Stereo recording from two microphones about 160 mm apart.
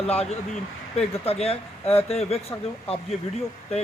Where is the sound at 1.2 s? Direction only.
40° left (ahead or behind).